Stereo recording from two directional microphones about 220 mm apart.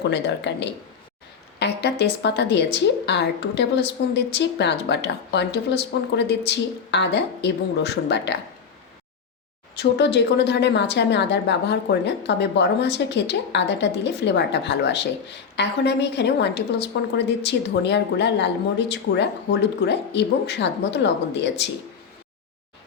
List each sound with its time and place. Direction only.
0.1 s a woman's voice: 55° left (ahead or behind)
9.7 s a woman's voice: 50° left (ahead or behind)